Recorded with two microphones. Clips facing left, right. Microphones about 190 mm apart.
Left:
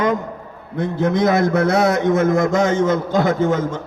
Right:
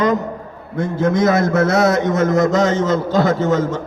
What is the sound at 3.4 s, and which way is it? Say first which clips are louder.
Speech: right 2 dB; 10° left (ahead or behind).